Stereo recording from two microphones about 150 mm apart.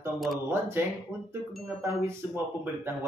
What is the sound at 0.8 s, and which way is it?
Speech, 15° right (ahead or behind).